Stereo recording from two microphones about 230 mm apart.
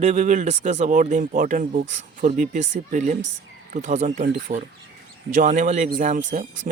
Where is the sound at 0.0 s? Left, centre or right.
Right.